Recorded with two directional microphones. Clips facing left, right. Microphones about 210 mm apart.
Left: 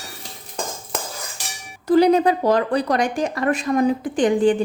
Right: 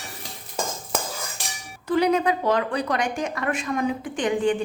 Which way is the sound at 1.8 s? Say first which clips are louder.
Left 6 dB; 35° left (ahead or behind).